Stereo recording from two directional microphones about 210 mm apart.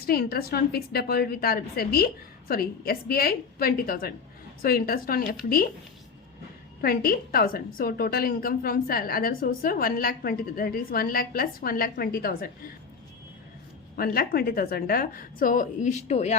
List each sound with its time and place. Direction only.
0.0 s a woman's voice: 45° left (ahead or behind)
6.8 s a woman's voice: 45° left (ahead or behind)
13.9 s a woman's voice: 45° left (ahead or behind)